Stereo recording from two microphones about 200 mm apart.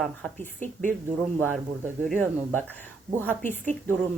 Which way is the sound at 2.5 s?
10° left (ahead or behind).